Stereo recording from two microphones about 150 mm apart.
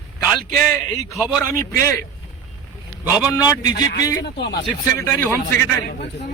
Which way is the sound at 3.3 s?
25° left (ahead or behind).